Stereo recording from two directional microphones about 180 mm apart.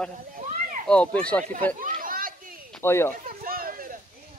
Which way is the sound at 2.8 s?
15° left (ahead or behind).